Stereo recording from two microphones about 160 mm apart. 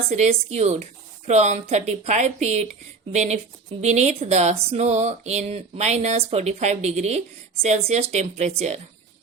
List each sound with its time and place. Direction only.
0.1 s a woman's voice: 40° right (ahead or behind)